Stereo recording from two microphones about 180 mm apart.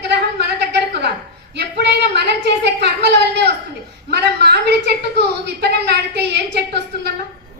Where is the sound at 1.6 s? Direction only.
70° right (ahead or behind).